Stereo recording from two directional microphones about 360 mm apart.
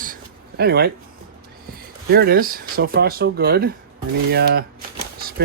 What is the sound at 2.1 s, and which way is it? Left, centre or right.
Speech, right.